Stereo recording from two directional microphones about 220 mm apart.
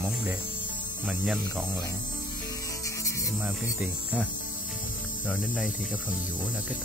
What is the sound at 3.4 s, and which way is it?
Speech, 5° right (ahead or behind).